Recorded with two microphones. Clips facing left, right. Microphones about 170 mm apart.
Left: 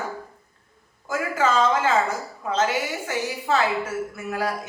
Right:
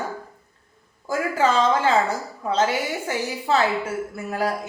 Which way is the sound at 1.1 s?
30° right (ahead or behind).